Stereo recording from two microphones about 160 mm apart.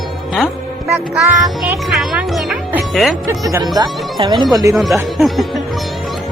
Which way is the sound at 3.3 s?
20° right (ahead or behind).